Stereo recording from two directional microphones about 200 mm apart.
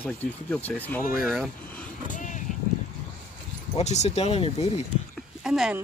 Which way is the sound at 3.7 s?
35° left (ahead or behind).